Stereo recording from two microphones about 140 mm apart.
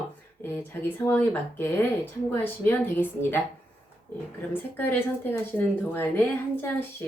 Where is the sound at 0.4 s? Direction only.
15° left (ahead or behind).